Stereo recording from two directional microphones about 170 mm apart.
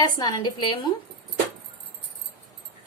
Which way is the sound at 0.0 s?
25° left (ahead or behind).